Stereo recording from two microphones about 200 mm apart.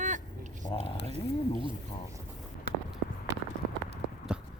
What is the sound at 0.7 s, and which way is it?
Speech, 30° left (ahead or behind).